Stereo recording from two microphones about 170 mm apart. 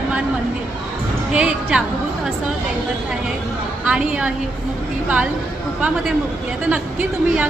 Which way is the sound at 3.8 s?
5° right (ahead or behind).